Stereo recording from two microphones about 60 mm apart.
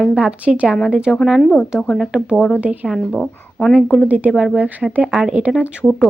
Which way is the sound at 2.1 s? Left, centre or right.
Centre.